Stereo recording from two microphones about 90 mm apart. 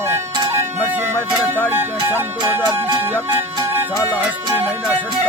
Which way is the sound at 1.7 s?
25° right (ahead or behind).